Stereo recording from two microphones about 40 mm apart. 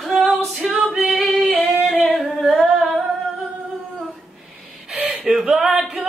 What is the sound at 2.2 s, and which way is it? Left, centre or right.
Singing, centre.